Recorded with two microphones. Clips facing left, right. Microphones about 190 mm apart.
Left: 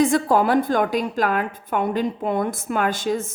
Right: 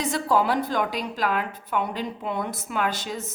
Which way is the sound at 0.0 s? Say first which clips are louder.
Left 6 dB; 50° left (ahead or behind).